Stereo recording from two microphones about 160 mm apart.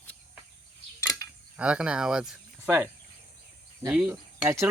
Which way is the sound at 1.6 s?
5° right (ahead or behind).